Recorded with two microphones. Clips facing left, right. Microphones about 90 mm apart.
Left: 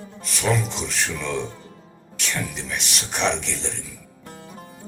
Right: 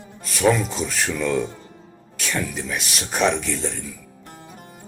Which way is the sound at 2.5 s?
5° right (ahead or behind).